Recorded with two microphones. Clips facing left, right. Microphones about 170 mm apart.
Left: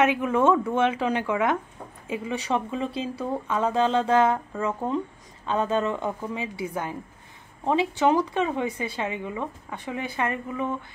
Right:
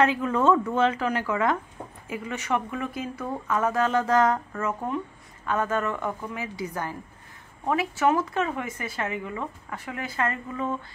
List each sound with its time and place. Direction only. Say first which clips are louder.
0.0 s speech: left 1 dB; 15° left (ahead or behind)
0.9 s a woman's voice: left 2 dB; 20° left (ahead or behind)
3.5 s a woman's voice: left 1 dB; 20° left (ahead or behind)
7.6 s speech: left 2 dB; 25° left (ahead or behind)